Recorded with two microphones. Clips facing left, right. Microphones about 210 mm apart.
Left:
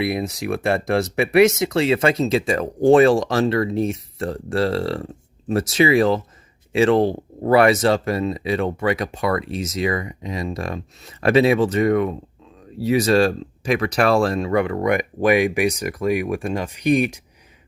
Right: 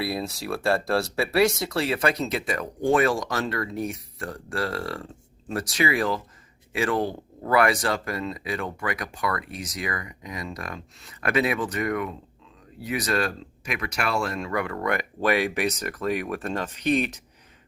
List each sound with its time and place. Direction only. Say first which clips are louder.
0.0 s speech: left 6 dB; 20° left (ahead or behind)